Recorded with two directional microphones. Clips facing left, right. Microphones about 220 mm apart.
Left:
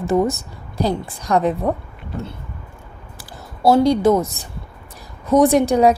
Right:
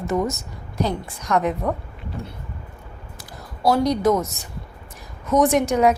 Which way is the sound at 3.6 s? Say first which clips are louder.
Left 4 dB; 25° left (ahead or behind).